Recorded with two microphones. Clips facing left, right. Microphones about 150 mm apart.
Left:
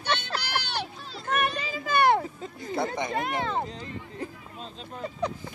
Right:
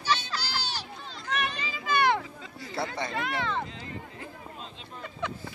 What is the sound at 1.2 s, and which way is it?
Children playing, 50° left (ahead or behind).